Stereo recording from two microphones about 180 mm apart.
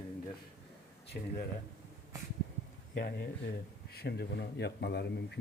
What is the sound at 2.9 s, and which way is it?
Speech, 65° left (ahead or behind).